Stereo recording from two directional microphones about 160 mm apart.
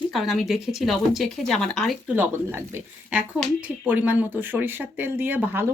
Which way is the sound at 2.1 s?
10° right (ahead or behind).